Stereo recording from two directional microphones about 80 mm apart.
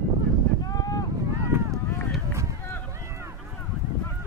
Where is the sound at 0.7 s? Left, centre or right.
Left.